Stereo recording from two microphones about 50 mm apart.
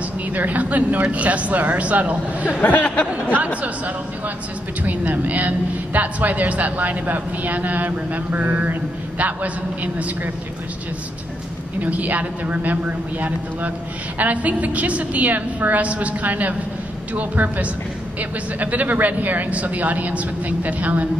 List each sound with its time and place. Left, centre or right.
0.3 s a woman's voice: right
2.6 s speech: left
4.8 s a woman's voice: right
9.9 s a woman's voice: right
11.8 s a woman's voice: right